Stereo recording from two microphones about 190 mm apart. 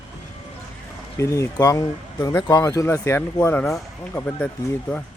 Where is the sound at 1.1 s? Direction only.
15° left (ahead or behind).